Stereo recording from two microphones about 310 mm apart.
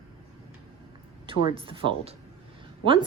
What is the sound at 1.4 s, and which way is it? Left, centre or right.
Speech, centre.